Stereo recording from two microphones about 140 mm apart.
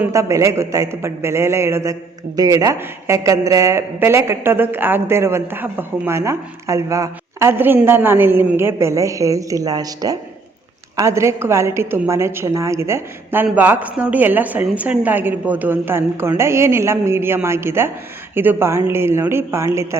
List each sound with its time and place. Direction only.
0.0 s a man's voice: 20° right (ahead or behind)